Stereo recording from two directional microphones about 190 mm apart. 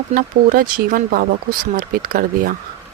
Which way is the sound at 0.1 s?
50° right (ahead or behind).